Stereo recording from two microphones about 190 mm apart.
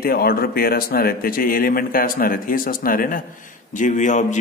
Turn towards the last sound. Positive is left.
turn(degrees=40)  # may be behind; listen again after turning